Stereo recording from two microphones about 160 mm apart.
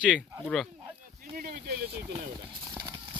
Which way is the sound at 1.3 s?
65° right (ahead or behind).